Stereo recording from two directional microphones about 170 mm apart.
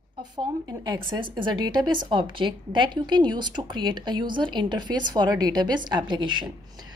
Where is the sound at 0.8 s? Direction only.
25° right (ahead or behind).